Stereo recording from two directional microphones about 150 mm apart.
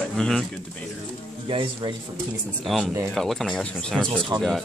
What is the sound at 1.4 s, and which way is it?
Speech, 35° right (ahead or behind).